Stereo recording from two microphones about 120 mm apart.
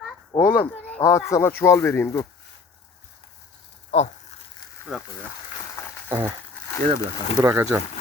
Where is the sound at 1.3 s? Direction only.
20° left (ahead or behind).